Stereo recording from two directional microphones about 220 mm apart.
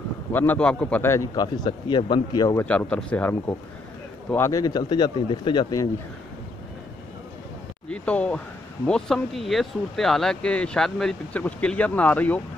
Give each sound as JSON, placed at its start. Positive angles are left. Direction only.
{"t": 0.3, "sound": "a man's voice", "side_deg": 10}
{"t": 7.9, "sound": "speech", "side_deg": 5}